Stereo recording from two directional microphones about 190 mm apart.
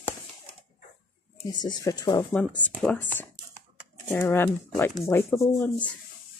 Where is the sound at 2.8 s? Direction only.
5° left (ahead or behind).